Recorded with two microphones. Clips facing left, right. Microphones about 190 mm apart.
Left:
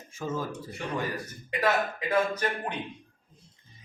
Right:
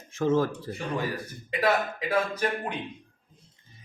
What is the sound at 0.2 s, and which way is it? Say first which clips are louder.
Speech: right 9 dB; 80° right.